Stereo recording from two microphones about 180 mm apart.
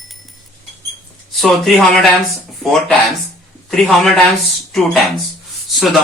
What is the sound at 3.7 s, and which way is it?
Speech, centre (ahead or behind).